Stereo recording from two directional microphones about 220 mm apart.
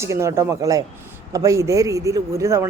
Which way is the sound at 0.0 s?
15° right (ahead or behind).